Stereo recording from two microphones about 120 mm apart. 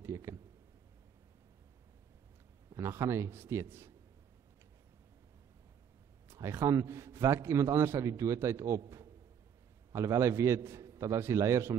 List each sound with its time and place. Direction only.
0.0 s a sound: 25° right (ahead or behind)
2.7 s a man's voice: 25° right (ahead or behind)
6.2 s a man's voice: 20° right (ahead or behind)